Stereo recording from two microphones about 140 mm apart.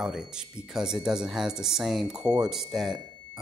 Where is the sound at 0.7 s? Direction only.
5° right (ahead or behind).